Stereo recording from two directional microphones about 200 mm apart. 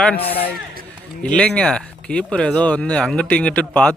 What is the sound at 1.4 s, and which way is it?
Speech, 5° left (ahead or behind).